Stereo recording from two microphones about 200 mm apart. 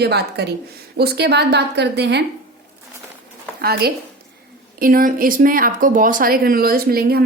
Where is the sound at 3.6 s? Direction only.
50° right (ahead or behind).